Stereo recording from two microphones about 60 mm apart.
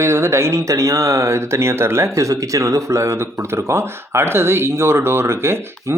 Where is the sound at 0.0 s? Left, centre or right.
Right.